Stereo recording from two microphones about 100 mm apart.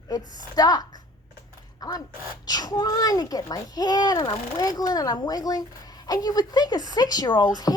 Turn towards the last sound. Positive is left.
turn(degrees=40)  # may be behind; listen again after turning